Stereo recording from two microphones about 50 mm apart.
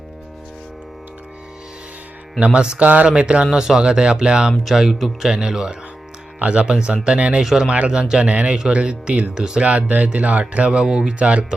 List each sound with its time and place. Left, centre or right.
2.4 s speech: centre
2.8 s speech: right
3.4 s speech: centre
8.3 s speech: right
9.6 s speech: right
10.7 s speech: centre
11.2 s speech: right